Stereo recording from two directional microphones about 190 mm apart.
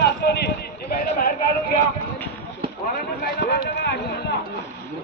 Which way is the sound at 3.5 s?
60° left (ahead or behind).